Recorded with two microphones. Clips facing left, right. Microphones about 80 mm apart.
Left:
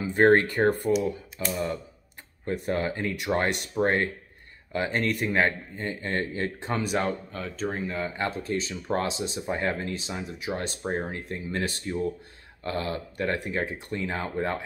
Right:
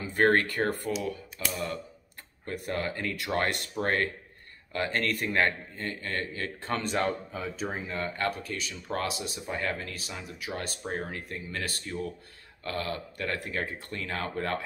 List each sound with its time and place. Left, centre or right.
0.0 s speech: left
6.7 s speech: centre
7.3 s speech: centre
8.1 s speech: left